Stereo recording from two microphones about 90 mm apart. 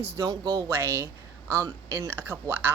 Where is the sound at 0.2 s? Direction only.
45° right (ahead or behind).